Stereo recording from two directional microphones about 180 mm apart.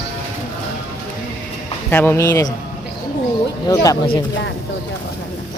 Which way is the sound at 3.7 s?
20° left (ahead or behind).